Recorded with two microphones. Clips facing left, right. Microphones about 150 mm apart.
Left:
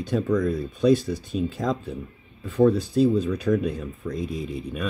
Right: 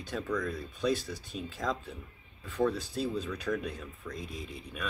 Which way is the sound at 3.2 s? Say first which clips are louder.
Left 11 dB; 20° left (ahead or behind).